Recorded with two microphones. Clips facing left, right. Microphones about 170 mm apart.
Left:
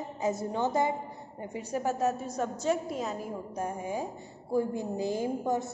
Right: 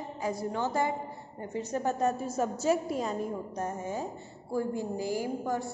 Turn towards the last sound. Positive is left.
turn(degrees=20)  # may be behind; listen again after turning